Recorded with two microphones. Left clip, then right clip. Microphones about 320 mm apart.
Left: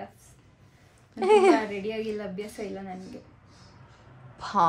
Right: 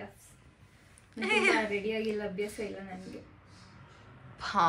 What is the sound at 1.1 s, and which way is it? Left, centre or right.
Speech, centre.